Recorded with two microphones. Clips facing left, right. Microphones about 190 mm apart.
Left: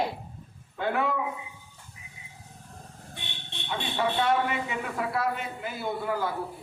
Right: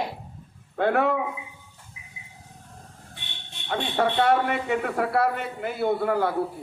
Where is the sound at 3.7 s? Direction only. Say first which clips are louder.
Right 4 dB; 60° right (ahead or behind).